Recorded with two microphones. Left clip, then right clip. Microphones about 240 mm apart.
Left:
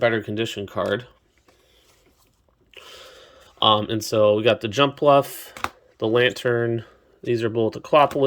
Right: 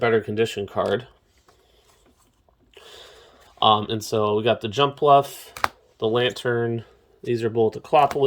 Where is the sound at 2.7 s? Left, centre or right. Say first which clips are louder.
Left 2 dB; centre.